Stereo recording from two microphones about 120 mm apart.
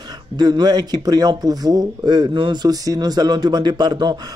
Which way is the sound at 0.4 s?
35° right (ahead or behind).